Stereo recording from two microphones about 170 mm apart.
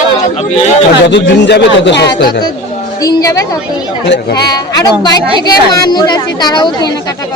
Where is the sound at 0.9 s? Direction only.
90° left.